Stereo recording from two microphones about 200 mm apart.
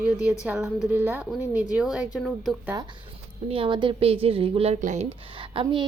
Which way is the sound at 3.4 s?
25° right (ahead or behind).